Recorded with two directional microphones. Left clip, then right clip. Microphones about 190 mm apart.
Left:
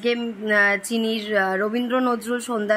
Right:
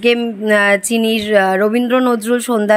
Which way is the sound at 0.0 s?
40° right (ahead or behind).